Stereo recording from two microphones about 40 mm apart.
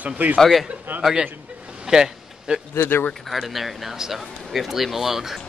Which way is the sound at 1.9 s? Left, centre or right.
Centre.